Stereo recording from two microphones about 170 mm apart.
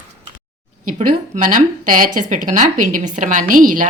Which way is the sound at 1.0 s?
55° right (ahead or behind).